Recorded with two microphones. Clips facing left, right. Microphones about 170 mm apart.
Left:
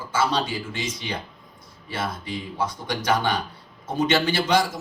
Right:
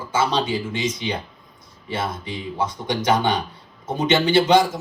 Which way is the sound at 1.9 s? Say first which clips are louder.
Right 3 dB; 20° right (ahead or behind).